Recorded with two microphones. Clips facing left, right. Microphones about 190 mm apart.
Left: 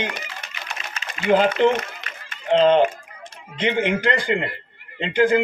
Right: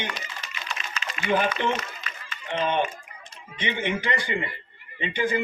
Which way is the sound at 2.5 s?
85° left.